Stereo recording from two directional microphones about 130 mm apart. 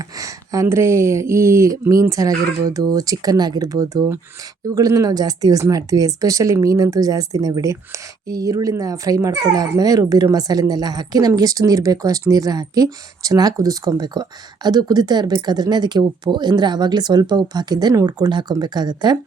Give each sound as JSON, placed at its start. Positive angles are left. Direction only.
{"t": 0.0, "sound": "speech", "side_deg": -25}